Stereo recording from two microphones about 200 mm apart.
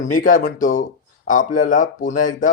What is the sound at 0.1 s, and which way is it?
Speech, 40° left (ahead or behind).